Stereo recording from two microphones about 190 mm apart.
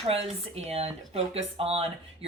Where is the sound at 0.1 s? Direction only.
30° right (ahead or behind).